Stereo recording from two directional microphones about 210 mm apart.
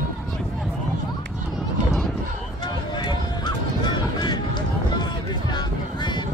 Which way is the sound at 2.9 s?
20° left (ahead or behind).